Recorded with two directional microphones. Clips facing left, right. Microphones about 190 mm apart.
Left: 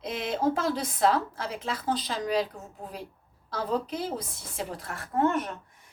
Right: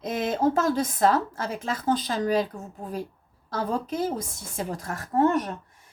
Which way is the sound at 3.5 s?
45° right (ahead or behind).